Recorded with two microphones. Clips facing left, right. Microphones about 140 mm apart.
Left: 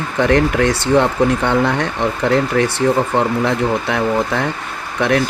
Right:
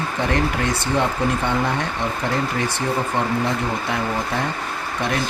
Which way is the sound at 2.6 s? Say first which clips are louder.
Left 8 dB; 75° left (ahead or behind).